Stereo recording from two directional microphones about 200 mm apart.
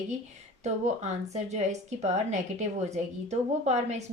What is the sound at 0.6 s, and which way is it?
A woman's voice, 35° right (ahead or behind).